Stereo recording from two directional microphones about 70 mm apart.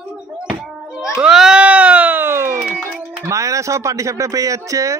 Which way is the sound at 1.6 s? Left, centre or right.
Centre.